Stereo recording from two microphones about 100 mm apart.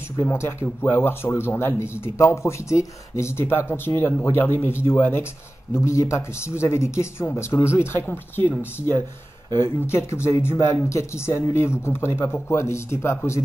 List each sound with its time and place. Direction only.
0.2 s speech: 25° left (ahead or behind)